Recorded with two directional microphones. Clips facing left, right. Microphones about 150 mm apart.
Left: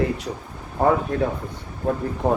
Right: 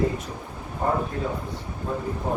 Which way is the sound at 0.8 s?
85° left.